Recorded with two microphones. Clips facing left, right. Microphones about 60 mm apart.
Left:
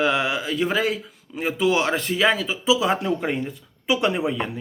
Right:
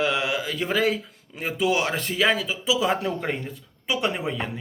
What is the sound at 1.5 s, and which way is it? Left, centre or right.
Speech, left.